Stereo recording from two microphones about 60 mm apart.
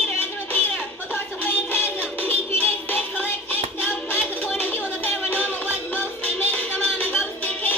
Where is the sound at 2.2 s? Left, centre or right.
Left.